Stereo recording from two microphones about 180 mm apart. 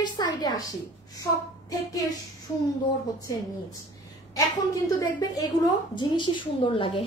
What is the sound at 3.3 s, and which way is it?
A woman's voice, 20° left (ahead or behind).